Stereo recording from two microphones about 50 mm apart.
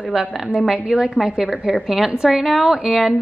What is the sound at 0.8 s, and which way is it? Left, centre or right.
A woman's voice, centre.